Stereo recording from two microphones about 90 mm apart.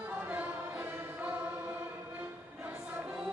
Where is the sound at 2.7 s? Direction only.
20° right (ahead or behind).